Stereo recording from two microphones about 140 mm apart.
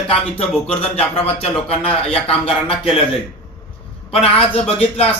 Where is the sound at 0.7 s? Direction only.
45° left (ahead or behind).